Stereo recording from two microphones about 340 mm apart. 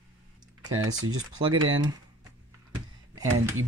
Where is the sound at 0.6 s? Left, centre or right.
Right.